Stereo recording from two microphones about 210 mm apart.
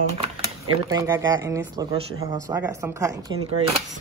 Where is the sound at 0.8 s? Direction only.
15° right (ahead or behind).